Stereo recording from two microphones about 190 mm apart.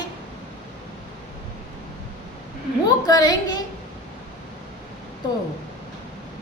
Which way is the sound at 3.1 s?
20° left (ahead or behind).